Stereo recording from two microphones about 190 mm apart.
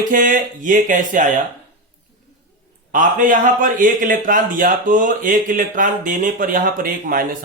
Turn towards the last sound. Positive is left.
turn(degrees=-45)  # may be behind; listen again after turning